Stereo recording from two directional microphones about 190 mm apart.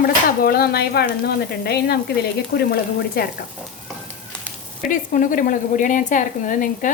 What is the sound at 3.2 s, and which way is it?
Speech, 55° left (ahead or behind).